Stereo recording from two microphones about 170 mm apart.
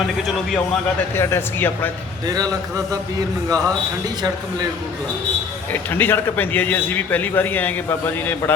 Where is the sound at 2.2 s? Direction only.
20° right (ahead or behind).